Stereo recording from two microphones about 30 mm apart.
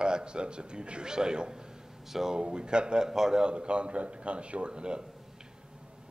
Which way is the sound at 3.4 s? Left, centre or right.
Right.